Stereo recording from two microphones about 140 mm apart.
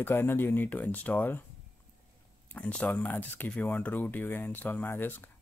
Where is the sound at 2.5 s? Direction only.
10° left (ahead or behind).